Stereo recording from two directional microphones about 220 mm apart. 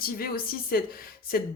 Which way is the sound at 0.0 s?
40° left (ahead or behind).